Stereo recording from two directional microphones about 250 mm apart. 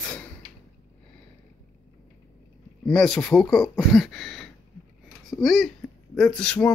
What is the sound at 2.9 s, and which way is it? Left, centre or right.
Speech, centre.